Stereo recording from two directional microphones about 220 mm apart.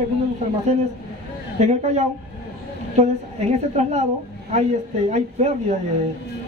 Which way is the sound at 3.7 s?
30° right (ahead or behind).